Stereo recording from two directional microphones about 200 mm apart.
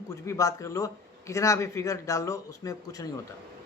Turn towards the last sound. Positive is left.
turn(degrees=15)  # may be behind; listen again after turning